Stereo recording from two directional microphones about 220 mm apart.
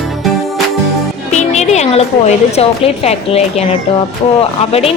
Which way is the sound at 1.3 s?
30° left (ahead or behind).